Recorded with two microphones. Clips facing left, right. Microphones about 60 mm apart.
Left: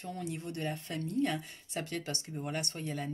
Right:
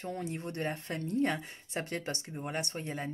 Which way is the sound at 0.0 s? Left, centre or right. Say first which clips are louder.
Right 2 dB; right.